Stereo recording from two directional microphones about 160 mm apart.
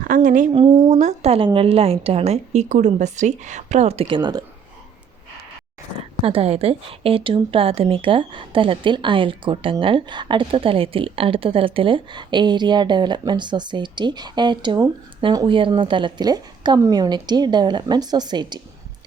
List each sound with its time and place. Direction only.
0.0 s a woman's voice: 55° right (ahead or behind)
0.5 s a woman's voice: 30° right (ahead or behind)
0.9 s a woman's voice: 45° right (ahead or behind); by 4.4 s 25° right (ahead or behind)
6.2 s a woman's voice: 40° right (ahead or behind)